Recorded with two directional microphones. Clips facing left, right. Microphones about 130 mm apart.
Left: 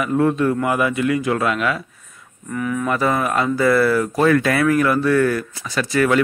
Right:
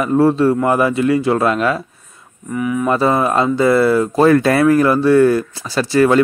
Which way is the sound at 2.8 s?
30° right (ahead or behind).